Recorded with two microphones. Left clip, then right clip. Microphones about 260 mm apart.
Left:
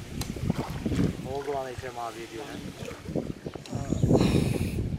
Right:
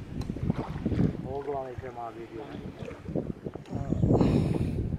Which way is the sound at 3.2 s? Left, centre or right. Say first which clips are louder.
Left 1 dB; right.